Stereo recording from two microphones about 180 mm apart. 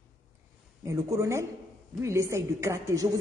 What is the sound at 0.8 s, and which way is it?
A woman's voice, 15° right (ahead or behind).